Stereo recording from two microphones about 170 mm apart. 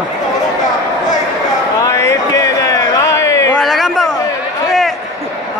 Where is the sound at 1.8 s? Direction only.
20° left (ahead or behind).